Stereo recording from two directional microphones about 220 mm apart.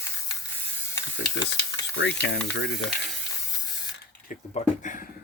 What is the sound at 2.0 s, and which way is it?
Speech, 55° left (ahead or behind).